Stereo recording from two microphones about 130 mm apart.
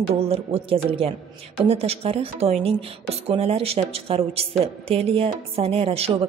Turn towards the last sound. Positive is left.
turn(degrees=-50)  # may be behind; listen again after turning